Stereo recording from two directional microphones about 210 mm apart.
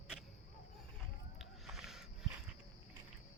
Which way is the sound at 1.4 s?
Centre (ahead or behind).